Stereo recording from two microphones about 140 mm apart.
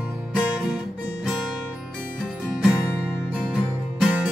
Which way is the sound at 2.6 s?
5° right (ahead or behind).